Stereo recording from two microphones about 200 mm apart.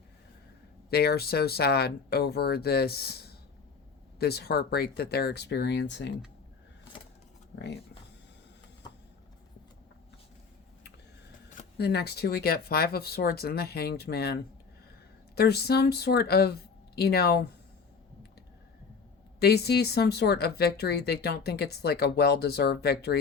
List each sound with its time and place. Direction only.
0.9 s speech: 50° left (ahead or behind)
11.8 s speech: 55° left (ahead or behind)
15.4 s speech: 55° left (ahead or behind)
19.4 s speech: 55° left (ahead or behind)